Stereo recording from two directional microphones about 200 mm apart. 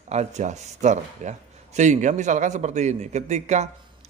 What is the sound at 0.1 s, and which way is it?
A man's voice, 35° right (ahead or behind).